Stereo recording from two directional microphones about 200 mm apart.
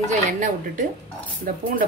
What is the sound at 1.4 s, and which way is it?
Speech, 45° right (ahead or behind).